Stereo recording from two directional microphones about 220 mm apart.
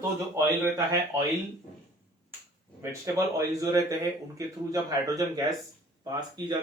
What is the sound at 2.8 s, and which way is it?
Speech, 15° right (ahead or behind).